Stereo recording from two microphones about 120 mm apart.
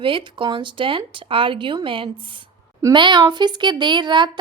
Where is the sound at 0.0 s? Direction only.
45° right (ahead or behind).